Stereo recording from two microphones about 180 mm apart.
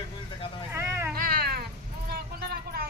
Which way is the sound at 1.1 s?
55° right (ahead or behind).